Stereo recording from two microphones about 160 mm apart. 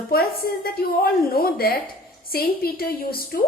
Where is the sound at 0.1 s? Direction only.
70° left (ahead or behind).